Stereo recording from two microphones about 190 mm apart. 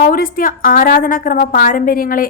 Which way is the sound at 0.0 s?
50° left (ahead or behind).